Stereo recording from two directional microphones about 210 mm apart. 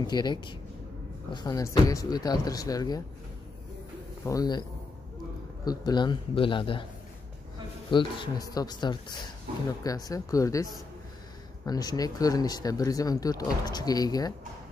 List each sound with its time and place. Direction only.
0.0 s speech: 20° left (ahead or behind)
4.3 s speech: 20° left (ahead or behind)
5.7 s speech: 20° left (ahead or behind)
7.9 s speech: 25° left (ahead or behind)